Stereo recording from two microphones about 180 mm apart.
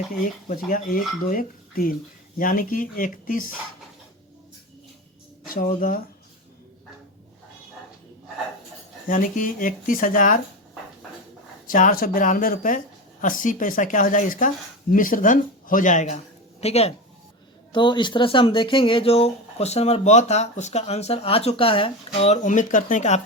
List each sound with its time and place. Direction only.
0.1 s speech: 50° left (ahead or behind)
5.5 s speech: 50° left (ahead or behind)
9.0 s speech: 50° left (ahead or behind)
11.7 s speech: 50° left (ahead or behind)